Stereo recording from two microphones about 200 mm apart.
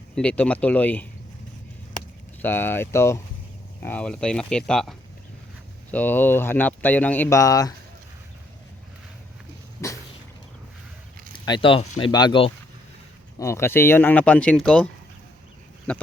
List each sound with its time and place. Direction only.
0.2 s speech: 5° left (ahead or behind)
2.4 s speech: 10° left (ahead or behind)
9.8 s cough: 15° left (ahead or behind)
11.4 s speech: 25° left (ahead or behind); by 14.8 s 5° left (ahead or behind)